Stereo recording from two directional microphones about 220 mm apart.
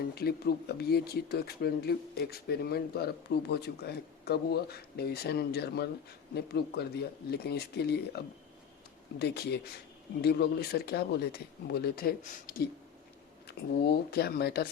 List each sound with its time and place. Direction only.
0.0 s speech: 45° left (ahead or behind)